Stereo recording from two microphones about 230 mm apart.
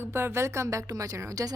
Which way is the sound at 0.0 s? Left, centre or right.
Centre.